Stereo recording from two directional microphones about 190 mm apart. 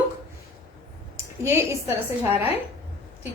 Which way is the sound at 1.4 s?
15° right (ahead or behind).